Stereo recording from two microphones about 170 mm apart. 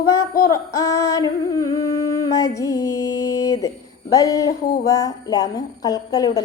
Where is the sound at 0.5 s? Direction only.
20° left (ahead or behind).